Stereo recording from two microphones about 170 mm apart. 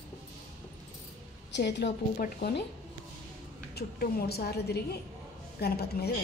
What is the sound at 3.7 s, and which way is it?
A woman's voice, 65° left (ahead or behind).